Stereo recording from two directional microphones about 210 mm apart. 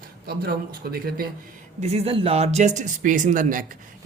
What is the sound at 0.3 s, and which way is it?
Speech, 45° right (ahead or behind).